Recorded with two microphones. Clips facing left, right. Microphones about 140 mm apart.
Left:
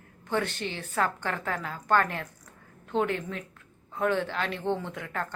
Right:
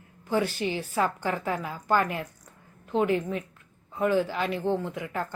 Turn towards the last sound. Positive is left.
turn(degrees=-5)  # may be behind; listen again after turning